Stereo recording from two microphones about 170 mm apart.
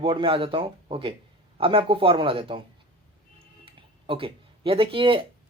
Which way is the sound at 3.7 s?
30° right (ahead or behind).